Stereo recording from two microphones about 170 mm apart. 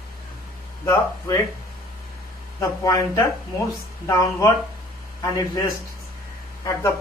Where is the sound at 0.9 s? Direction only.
20° left (ahead or behind).